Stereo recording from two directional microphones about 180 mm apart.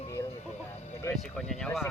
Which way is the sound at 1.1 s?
5° left (ahead or behind).